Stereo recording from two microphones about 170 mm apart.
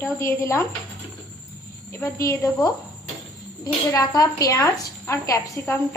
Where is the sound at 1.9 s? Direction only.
15° left (ahead or behind).